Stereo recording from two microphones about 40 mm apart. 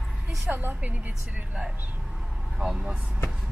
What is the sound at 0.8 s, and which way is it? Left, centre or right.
Speech, right.